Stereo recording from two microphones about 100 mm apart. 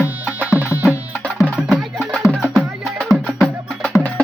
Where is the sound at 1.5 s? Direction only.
5° right (ahead or behind).